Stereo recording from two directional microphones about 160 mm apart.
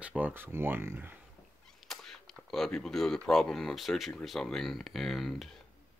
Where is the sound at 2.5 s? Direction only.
5° left (ahead or behind).